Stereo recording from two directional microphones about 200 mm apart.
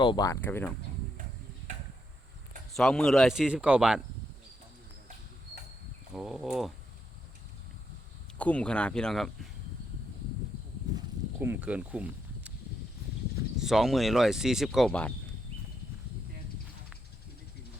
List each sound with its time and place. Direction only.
0.0 s speech: 20° left (ahead or behind)
0.4 s speech: 10° left (ahead or behind)
2.7 s speech: centre (ahead or behind)
6.1 s speech: centre (ahead or behind)
8.4 s speech: 5° left (ahead or behind)
11.3 s speech: 10° right (ahead or behind)
13.6 s speech: centre (ahead or behind)